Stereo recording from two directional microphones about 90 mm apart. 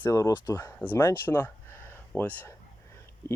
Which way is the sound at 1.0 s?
25° left (ahead or behind).